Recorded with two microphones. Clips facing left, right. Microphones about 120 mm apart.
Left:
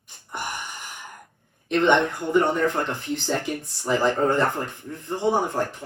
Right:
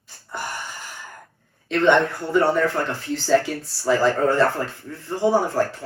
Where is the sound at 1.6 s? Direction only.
15° left (ahead or behind).